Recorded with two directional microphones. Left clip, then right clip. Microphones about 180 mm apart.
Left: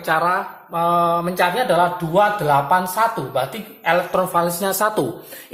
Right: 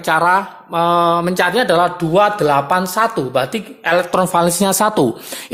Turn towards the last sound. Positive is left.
turn(degrees=-35)  # may be behind; listen again after turning